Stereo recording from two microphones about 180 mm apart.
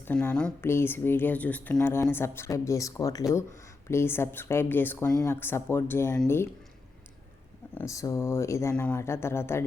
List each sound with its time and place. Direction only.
0.0 s speech: 10° left (ahead or behind)
7.8 s speech: 15° left (ahead or behind)